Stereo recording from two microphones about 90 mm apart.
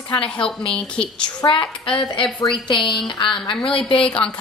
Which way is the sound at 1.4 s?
65° left (ahead or behind).